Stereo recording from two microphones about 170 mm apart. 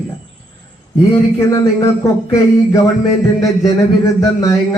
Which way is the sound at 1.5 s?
20° left (ahead or behind).